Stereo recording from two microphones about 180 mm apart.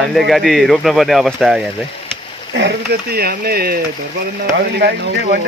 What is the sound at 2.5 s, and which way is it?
Speech, 65° right (ahead or behind).